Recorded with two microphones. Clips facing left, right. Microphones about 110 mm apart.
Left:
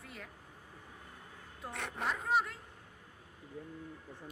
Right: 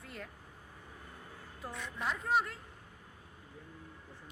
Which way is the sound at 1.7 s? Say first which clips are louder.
Left 2 dB; 65° left (ahead or behind).